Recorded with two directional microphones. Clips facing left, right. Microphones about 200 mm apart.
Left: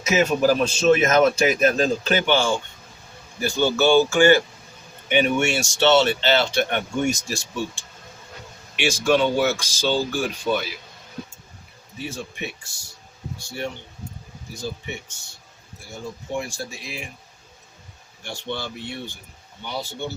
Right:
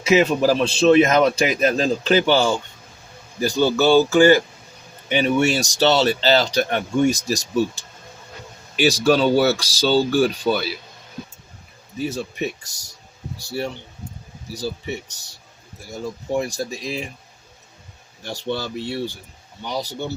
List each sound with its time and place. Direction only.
0.0 s speech: 30° right (ahead or behind)
12.0 s speech: 40° right (ahead or behind)
14.5 s speech: 35° right (ahead or behind)
16.4 s speech: 40° right (ahead or behind)
18.2 s speech: 40° right (ahead or behind)